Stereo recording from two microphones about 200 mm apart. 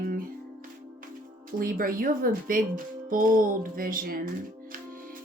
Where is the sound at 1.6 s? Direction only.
45° right (ahead or behind).